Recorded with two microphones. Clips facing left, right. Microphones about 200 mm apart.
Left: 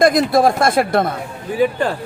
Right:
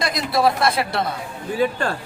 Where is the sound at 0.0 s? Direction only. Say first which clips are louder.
Left 7 dB; 50° left (ahead or behind).